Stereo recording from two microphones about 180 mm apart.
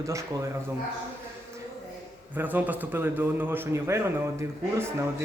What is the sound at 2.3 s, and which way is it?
A man's voice, 10° right (ahead or behind).